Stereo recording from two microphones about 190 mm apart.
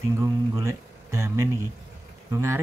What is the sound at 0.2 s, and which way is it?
Speech, 15° right (ahead or behind).